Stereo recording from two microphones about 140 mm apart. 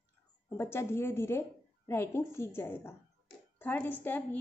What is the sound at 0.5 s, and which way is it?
Speech, 15° left (ahead or behind).